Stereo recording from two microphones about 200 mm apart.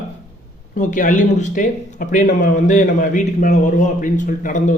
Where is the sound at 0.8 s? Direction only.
40° left (ahead or behind).